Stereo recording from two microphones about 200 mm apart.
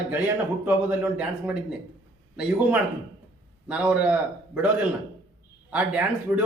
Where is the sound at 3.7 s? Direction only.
5° right (ahead or behind).